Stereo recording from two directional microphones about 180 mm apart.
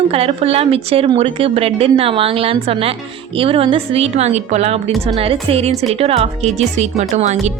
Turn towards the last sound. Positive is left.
turn(degrees=-40)  # may be behind; listen again after turning